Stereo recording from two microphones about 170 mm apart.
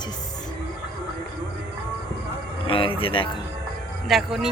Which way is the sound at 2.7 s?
30° left (ahead or behind).